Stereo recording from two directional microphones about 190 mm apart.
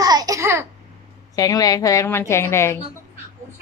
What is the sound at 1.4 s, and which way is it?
Speech, 20° left (ahead or behind).